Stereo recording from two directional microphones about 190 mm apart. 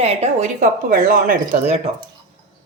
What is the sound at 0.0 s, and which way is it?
Speech, 30° right (ahead or behind).